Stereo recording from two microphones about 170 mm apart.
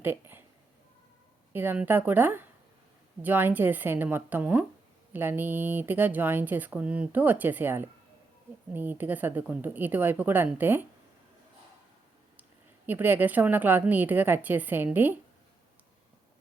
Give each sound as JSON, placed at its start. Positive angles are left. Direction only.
{"t": 0.0, "sound": "a sound", "side_deg": -10}
{"t": 1.5, "sound": "a woman's voice", "side_deg": -10}
{"t": 12.4, "sound": "a woman's voice", "side_deg": -10}